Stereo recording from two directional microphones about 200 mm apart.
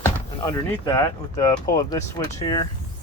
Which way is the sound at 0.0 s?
15° left (ahead or behind).